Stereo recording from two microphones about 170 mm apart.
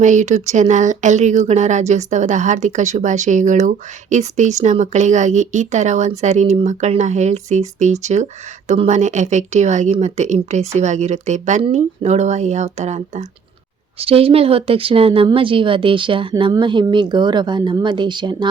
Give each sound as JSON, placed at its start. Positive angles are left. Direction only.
{"t": 0.0, "sound": "speech", "side_deg": -45}